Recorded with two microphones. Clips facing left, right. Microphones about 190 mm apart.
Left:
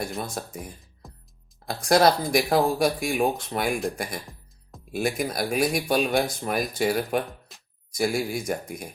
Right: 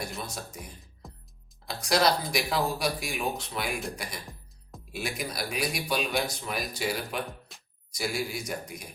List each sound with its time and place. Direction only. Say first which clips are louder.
0.0 s speech: left 6 dB; 50° left (ahead or behind)
1.0 s music: even; centre (ahead or behind)
1.6 s speech: left 6 dB; 50° left (ahead or behind)
7.5 s music: left 1 dB; centre (ahead or behind)
7.9 s speech: left 7 dB; 50° left (ahead or behind)